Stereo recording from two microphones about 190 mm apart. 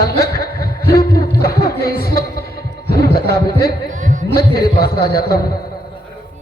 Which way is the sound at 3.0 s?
55° left (ahead or behind).